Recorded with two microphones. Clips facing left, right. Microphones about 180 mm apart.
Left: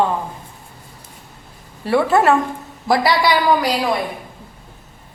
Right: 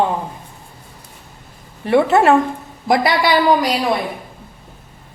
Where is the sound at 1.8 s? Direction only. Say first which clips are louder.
Right 2 dB; 20° right (ahead or behind).